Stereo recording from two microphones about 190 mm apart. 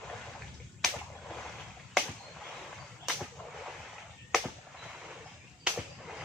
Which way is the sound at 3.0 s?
Centre (ahead or behind).